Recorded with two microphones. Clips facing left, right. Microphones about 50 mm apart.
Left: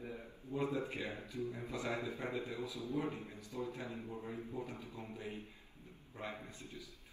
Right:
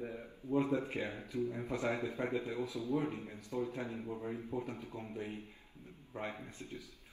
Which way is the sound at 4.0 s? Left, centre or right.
Centre.